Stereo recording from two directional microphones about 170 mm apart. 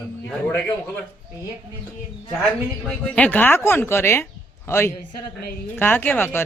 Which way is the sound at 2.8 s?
5° left (ahead or behind).